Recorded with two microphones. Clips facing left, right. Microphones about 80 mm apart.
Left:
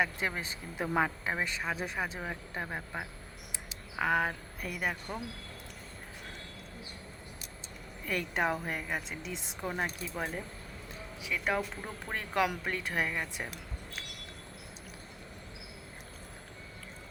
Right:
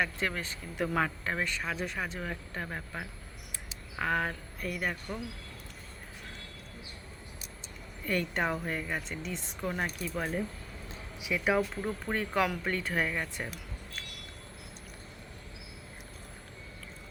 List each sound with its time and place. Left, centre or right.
0.0 s speech: centre
8.0 s speech: centre
11.2 s speech: centre
11.5 s speech: centre